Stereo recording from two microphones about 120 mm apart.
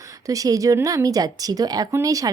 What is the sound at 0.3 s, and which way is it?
Speech, 30° right (ahead or behind).